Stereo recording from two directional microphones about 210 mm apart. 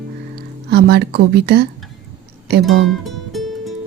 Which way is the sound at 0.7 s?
50° right (ahead or behind).